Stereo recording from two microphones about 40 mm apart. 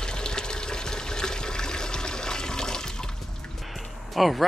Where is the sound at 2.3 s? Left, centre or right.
Centre.